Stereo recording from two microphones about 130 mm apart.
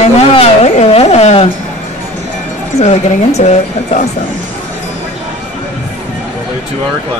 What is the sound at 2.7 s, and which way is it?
Speech, 55° left (ahead or behind).